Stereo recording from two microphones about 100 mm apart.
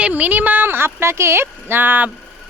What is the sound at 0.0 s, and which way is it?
Speech, 15° right (ahead or behind).